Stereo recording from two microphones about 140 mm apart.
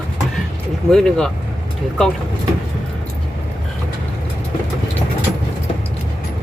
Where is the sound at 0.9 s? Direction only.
5° left (ahead or behind).